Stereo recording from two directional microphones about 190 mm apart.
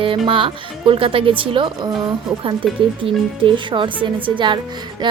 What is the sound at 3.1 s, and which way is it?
Speech, 25° right (ahead or behind).